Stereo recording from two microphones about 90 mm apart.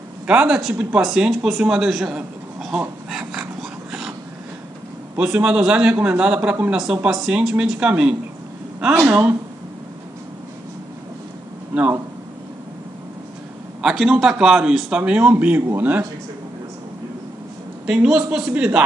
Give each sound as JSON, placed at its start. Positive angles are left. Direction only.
{"t": 0.3, "sound": "a man's voice", "side_deg": -10}
{"t": 5.1, "sound": "speech", "side_deg": -15}
{"t": 13.8, "sound": "speech", "side_deg": -5}
{"t": 17.8, "sound": "speech", "side_deg": -10}